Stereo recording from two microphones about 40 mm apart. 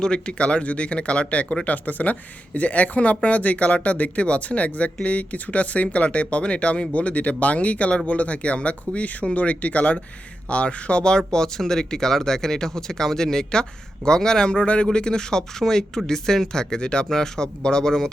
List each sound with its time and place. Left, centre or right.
0.0 s speech: left